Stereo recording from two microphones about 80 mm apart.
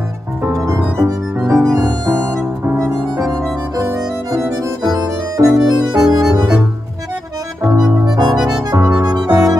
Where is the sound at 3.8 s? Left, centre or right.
Right.